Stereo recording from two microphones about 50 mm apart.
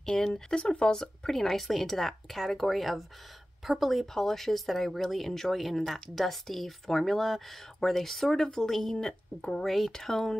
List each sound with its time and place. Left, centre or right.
0.0 s speech: centre
1.0 s speech: centre
8.9 s speech: centre
9.7 s speech: centre